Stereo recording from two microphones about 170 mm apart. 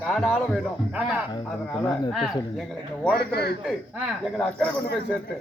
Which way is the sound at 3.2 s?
70° left (ahead or behind).